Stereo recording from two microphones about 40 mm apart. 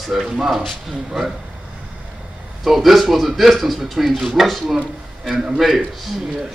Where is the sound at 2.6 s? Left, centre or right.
Centre.